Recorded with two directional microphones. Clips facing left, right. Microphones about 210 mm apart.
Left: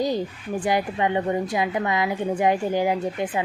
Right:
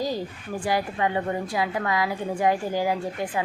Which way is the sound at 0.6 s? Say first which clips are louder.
Left 2 dB; 20° left (ahead or behind).